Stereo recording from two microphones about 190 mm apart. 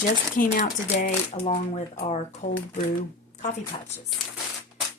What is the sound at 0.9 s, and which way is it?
Speech, 35° left (ahead or behind).